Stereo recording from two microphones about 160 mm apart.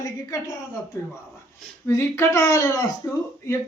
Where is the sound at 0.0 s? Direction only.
20° left (ahead or behind).